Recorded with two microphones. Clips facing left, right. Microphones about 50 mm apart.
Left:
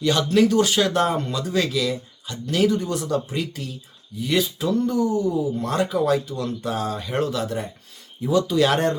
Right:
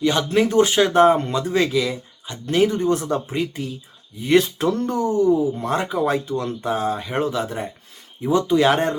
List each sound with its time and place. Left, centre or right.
0.0 s speech: right
4.4 s speech: right
5.5 s speech: right